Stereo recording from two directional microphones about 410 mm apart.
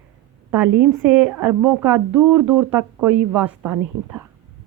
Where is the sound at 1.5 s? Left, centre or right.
Right.